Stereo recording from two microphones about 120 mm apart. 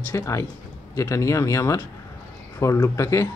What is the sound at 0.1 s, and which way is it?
Speech, 25° left (ahead or behind).